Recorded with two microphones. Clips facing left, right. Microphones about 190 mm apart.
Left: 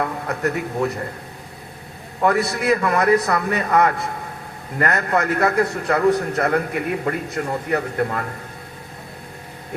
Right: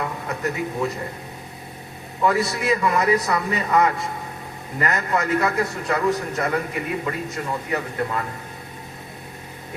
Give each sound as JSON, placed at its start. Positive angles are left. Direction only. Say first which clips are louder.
{"t": 0.0, "sound": "a man's voice", "louder": "left 4 dB", "side_deg": 55}
{"t": 2.2, "sound": "a man's voice", "louder": "left 2 dB", "side_deg": 60}